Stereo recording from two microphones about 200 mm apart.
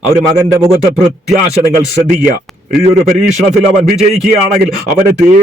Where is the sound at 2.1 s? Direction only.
50° right (ahead or behind).